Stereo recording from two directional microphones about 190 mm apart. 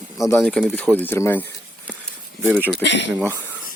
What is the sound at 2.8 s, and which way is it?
Speech, 70° left (ahead or behind).